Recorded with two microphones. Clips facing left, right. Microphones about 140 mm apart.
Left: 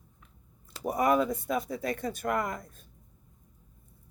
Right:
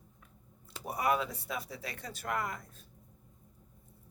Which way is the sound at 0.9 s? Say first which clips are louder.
Left 6 dB; 45° left (ahead or behind).